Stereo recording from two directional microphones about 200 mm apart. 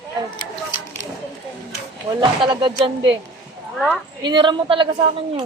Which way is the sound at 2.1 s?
20° right (ahead or behind).